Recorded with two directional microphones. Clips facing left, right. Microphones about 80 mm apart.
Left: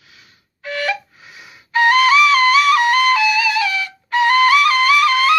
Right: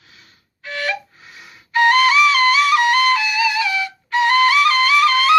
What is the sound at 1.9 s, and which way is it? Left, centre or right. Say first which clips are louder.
Flute: left 2 dB; centre.